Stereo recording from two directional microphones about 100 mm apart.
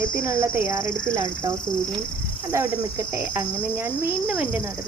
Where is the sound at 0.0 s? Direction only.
25° right (ahead or behind).